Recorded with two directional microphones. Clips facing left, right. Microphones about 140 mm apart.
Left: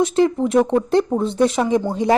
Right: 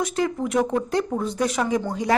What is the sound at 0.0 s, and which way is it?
A woman's voice, 25° left (ahead or behind).